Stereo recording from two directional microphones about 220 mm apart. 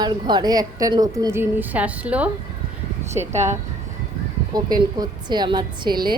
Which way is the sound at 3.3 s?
30° right (ahead or behind).